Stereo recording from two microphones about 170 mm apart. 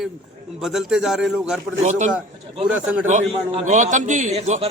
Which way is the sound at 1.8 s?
45° right (ahead or behind).